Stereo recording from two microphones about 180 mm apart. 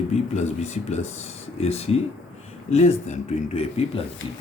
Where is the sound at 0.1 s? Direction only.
40° left (ahead or behind).